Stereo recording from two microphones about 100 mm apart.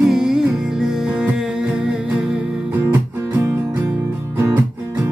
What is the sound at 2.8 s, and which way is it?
Music, 25° right (ahead or behind).